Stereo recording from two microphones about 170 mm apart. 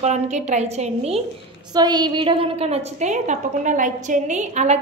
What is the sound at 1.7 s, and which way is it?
A woman's voice, 25° right (ahead or behind).